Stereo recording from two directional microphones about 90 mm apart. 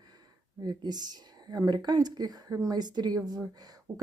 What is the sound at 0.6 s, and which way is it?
Speech, 50° right (ahead or behind).